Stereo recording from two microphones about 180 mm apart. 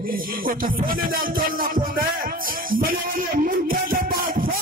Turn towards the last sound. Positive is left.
turn(degrees=-50)  # may be behind; listen again after turning